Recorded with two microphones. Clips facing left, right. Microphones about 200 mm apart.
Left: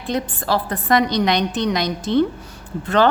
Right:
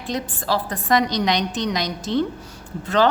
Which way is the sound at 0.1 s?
60° left (ahead or behind).